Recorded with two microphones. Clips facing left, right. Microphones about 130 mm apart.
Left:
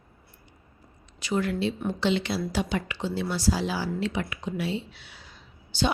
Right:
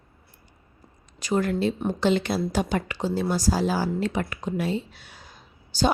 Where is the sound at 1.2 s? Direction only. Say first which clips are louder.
Right 3 dB; 40° right (ahead or behind).